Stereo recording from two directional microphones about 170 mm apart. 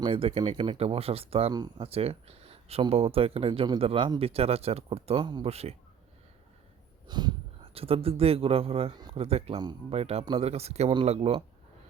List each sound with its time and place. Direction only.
0.0 s a man's voice: 35° right (ahead or behind)
7.1 s a man's voice: 25° right (ahead or behind)